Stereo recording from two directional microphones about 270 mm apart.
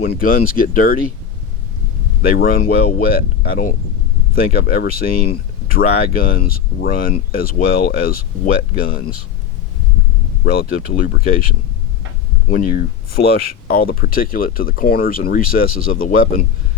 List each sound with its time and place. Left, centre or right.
0.0 s speech: left
2.2 s speech: left
10.4 s speech: left
12.5 s speech: left